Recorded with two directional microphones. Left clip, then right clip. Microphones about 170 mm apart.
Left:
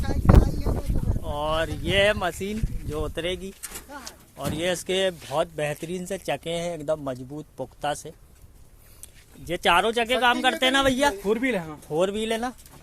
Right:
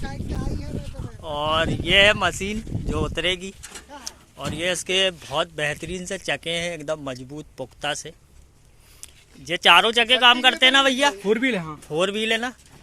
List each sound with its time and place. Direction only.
1.2 s speech: centre (ahead or behind)
4.4 s speech: 20° left (ahead or behind)
5.2 s speech: 5° left (ahead or behind)
9.5 s speech: 5° left (ahead or behind)
11.3 s a man's voice: 50° right (ahead or behind)
11.9 s speech: centre (ahead or behind)